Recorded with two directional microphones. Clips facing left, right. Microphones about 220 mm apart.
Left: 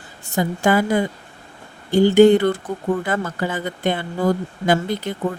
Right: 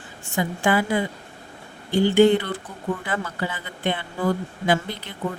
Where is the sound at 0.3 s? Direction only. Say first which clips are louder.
Left 4 dB; 40° left (ahead or behind).